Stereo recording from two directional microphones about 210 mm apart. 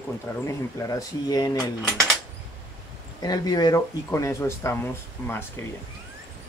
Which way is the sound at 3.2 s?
20° left (ahead or behind).